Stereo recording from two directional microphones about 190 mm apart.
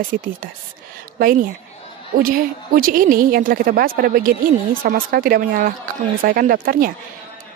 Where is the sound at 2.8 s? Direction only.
50° right (ahead or behind).